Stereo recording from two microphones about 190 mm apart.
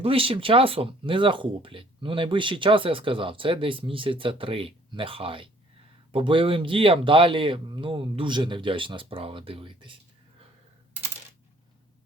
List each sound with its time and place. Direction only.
0.0 s speech: 30° right (ahead or behind)